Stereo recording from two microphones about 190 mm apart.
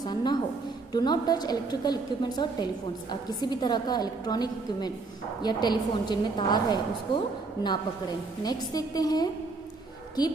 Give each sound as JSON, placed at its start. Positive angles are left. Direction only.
{"t": 0.0, "sound": "a woman's voice", "side_deg": 20}
{"t": 8.5, "sound": "a woman's voice", "side_deg": 20}